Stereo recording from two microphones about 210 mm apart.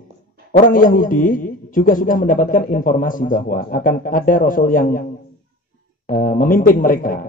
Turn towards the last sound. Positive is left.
turn(degrees=40)  # may be behind; listen again after turning